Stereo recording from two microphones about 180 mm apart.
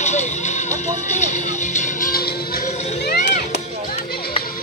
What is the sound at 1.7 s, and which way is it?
Music, 50° left (ahead or behind).